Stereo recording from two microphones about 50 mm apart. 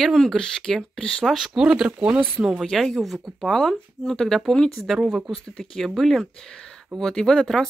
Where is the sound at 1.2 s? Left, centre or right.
Centre; by 2.2 s right.